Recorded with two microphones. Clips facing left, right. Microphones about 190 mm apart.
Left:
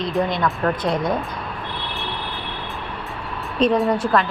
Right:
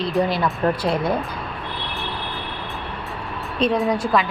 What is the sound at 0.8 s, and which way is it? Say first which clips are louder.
Speech: even; 5° right (ahead or behind).